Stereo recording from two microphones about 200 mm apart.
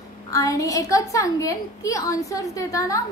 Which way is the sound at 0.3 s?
15° left (ahead or behind).